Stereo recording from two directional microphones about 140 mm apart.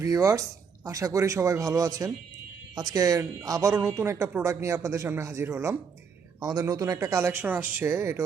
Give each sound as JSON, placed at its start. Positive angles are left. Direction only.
{"t": 0.0, "sound": "a woman's voice", "side_deg": -25}